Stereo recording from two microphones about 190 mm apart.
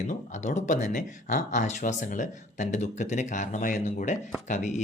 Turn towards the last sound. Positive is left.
turn(degrees=40)  # may be behind; listen again after turning